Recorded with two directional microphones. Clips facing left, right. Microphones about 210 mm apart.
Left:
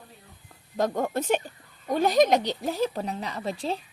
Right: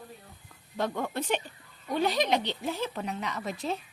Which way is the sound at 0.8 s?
40° left (ahead or behind).